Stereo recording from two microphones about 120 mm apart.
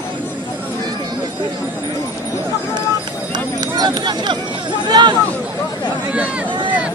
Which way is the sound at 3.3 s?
35° right (ahead or behind).